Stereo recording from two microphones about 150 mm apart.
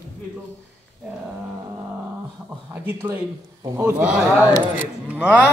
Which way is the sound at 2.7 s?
15° right (ahead or behind).